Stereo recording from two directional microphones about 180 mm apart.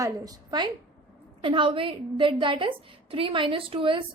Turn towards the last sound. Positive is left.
turn(degrees=-30)  # may be behind; listen again after turning